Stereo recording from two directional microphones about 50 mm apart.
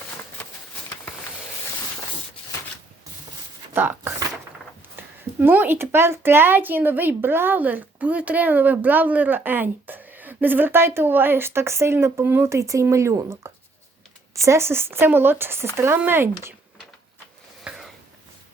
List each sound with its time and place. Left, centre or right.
3.8 s speech: right
5.0 s a sound: right
5.4 s speech: right
7.9 s speech: right
12.5 s speech: right
17.6 s a sound: centre